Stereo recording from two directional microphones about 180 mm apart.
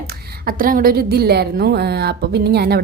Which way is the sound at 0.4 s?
55° right (ahead or behind).